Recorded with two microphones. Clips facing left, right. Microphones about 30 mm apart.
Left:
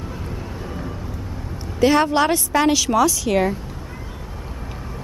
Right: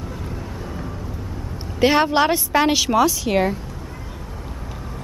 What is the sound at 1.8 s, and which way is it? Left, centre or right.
A woman's voice, right.